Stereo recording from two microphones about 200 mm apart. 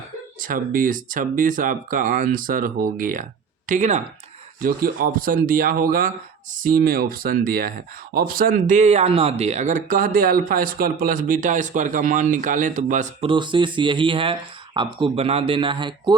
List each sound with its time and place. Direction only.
0.4 s speech: 45° right (ahead or behind)
13.2 s speech: 25° right (ahead or behind)